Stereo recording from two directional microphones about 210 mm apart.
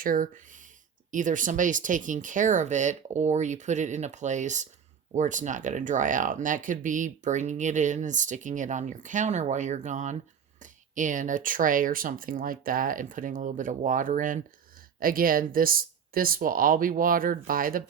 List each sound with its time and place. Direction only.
0.0 s speech: 40° right (ahead or behind)